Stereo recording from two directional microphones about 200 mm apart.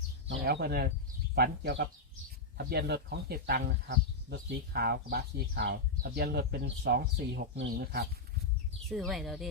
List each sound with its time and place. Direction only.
0.3 s speech: 55° right (ahead or behind)
8.9 s speech: centre (ahead or behind)